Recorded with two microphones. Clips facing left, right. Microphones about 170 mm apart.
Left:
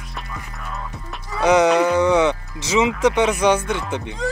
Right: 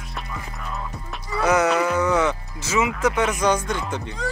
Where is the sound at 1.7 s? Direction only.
5° right (ahead or behind).